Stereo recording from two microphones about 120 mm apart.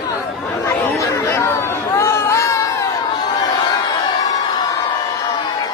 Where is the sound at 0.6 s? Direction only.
25° left (ahead or behind).